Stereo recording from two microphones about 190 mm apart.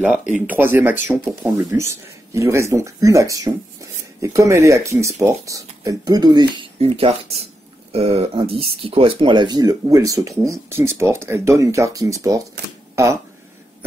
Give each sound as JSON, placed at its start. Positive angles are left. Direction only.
{"t": 0.3, "sound": "speech", "side_deg": -10}